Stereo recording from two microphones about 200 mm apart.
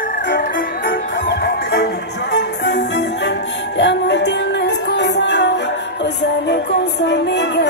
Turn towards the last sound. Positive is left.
turn(degrees=60)  # may be behind; listen again after turning